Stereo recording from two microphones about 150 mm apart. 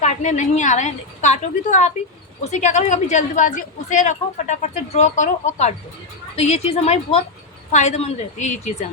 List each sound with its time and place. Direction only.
0.0 s a woman's voice: 50° left (ahead or behind)